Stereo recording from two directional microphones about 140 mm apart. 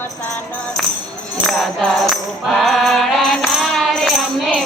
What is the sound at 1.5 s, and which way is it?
Music, 5° left (ahead or behind).